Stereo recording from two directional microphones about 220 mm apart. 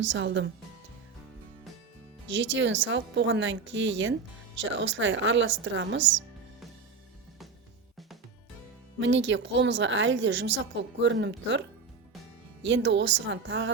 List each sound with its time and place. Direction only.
0.2 s a woman's voice: 55° right (ahead or behind)
2.3 s a woman's voice: 55° right (ahead or behind)
9.0 s a woman's voice: 55° right (ahead or behind)
12.6 s a woman's voice: 55° right (ahead or behind)